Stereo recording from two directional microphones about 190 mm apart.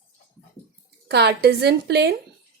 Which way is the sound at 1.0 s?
60° right (ahead or behind).